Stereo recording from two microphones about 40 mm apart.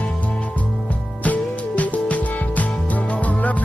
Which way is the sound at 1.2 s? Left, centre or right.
Left.